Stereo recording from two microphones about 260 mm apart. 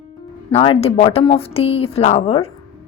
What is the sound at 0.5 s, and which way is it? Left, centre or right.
Speech, left.